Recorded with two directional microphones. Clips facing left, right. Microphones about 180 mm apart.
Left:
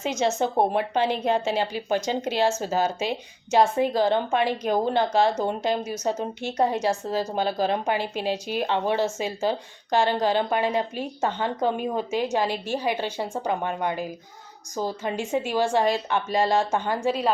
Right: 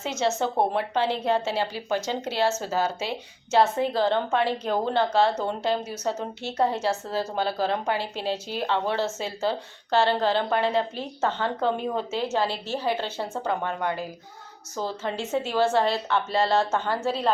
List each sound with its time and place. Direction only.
0.0 s speech: 15° left (ahead or behind)